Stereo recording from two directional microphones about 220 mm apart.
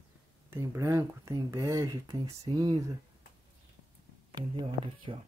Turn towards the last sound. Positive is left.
turn(degrees=-25)  # may be behind; listen again after turning